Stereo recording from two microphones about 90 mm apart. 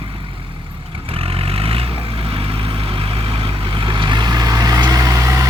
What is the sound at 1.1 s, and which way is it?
Vehicle, 90° right.